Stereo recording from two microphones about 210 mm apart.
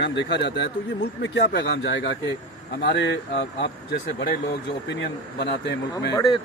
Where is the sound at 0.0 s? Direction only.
55° left (ahead or behind).